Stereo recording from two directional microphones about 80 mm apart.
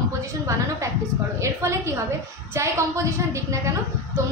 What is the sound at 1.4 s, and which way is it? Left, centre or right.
Speech, right.